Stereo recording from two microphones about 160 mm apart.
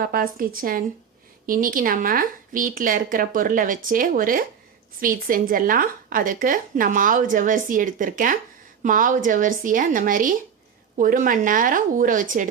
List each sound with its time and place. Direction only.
0.0 s speech: 65° right (ahead or behind)